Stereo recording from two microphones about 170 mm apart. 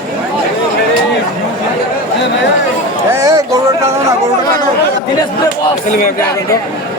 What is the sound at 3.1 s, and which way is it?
Speech, 20° right (ahead or behind).